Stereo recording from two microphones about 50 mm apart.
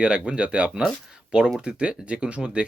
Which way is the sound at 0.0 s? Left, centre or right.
Centre.